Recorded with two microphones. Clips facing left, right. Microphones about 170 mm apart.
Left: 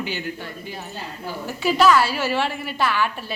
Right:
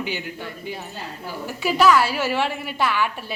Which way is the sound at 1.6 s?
10° right (ahead or behind).